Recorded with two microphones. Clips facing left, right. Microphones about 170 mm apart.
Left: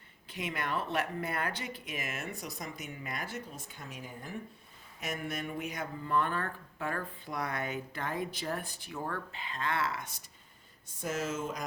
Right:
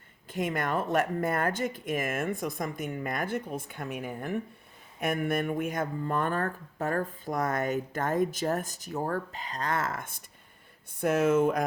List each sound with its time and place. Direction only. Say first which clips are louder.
0.3 s speech: right 7 dB; 50° right (ahead or behind)